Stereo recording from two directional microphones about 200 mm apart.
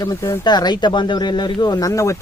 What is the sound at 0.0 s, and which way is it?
Speech, 15° left (ahead or behind).